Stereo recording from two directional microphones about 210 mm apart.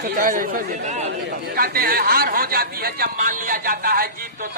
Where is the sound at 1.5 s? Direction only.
45° right (ahead or behind).